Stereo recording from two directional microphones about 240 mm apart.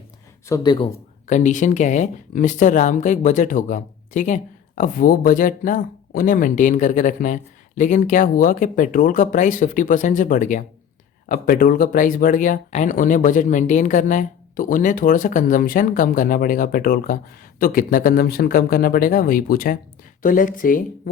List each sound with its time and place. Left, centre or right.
0.4 s speech: centre
1.3 s speech: left